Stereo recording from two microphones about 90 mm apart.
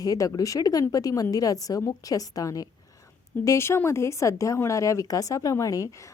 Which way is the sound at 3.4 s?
30° left (ahead or behind).